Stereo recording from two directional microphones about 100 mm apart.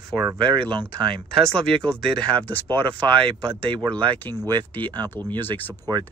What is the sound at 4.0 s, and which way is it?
Speech, 45° right (ahead or behind).